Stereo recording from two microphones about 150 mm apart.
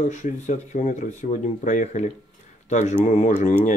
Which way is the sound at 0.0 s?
55° left (ahead or behind).